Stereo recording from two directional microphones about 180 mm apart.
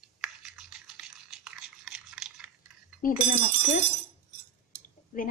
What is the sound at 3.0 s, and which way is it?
Speech, 50° left (ahead or behind).